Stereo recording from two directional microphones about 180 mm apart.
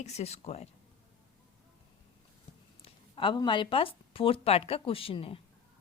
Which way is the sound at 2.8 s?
30° left (ahead or behind).